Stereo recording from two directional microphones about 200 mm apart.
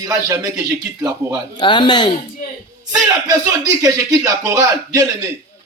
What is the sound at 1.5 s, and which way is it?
Speech, 25° left (ahead or behind).